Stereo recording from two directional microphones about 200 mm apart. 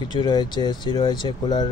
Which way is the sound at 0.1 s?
20° left (ahead or behind).